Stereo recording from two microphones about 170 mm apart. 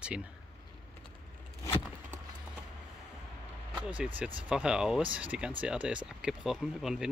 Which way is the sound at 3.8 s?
10° right (ahead or behind).